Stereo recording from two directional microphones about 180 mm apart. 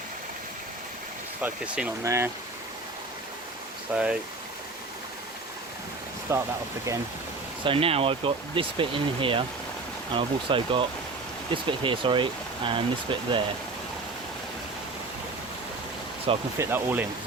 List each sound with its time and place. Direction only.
1.4 s speech: 5° right (ahead or behind)
3.9 s speech: 5° right (ahead or behind)
6.3 s speech: 15° right (ahead or behind)
7.6 s speech: 30° right (ahead or behind)
16.6 s speech: 10° right (ahead or behind)